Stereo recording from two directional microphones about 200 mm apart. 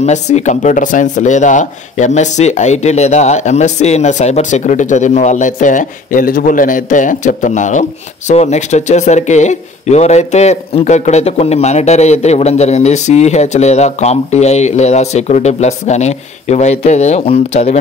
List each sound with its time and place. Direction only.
0.0 s speech: 35° left (ahead or behind)